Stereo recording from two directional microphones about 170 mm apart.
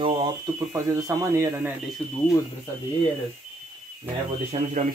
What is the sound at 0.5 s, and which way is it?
Speech, 15° right (ahead or behind).